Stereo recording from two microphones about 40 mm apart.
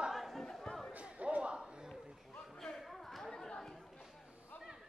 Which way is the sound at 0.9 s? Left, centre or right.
Right.